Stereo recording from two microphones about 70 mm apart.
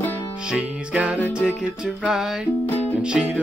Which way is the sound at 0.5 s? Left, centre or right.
Centre.